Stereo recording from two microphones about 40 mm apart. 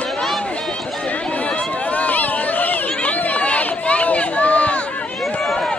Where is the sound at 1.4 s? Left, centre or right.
Left.